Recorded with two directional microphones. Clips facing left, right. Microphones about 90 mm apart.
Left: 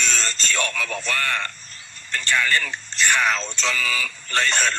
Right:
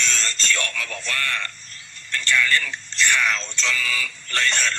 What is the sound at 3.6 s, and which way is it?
A man's voice, 25° left (ahead or behind).